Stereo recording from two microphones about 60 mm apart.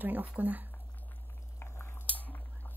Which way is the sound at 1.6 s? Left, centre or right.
Left.